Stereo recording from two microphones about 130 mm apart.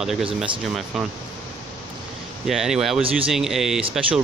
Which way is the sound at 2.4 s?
5° right (ahead or behind).